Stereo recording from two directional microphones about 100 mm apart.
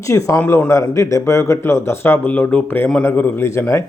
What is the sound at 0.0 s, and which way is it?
A man's voice, 35° left (ahead or behind).